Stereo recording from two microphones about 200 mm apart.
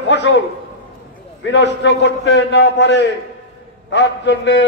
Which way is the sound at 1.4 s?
60° left (ahead or behind).